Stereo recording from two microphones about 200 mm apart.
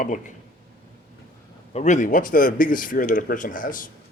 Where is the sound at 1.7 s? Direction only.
35° left (ahead or behind).